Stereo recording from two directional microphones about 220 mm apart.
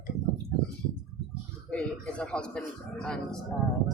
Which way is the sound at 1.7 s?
5° left (ahead or behind).